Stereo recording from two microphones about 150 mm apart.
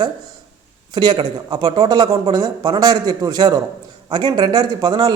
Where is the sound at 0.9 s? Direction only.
30° right (ahead or behind).